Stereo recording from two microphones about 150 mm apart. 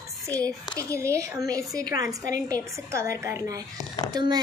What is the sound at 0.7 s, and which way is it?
A woman's voice, 20° right (ahead or behind).